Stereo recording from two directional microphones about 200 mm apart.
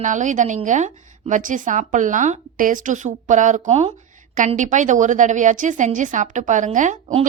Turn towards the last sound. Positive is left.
turn(degrees=-35)  # may be behind; listen again after turning